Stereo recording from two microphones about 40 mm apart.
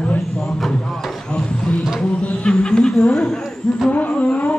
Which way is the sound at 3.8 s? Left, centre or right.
Left.